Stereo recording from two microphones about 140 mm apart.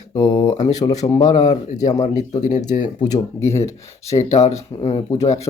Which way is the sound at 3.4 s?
20° left (ahead or behind).